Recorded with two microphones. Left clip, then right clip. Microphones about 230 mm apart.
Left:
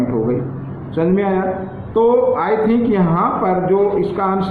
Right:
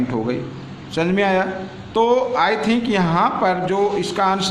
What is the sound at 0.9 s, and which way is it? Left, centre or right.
A man's voice, right.